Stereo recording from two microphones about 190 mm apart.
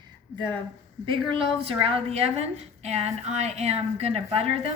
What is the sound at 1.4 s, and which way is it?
A woman's voice, 30° right (ahead or behind).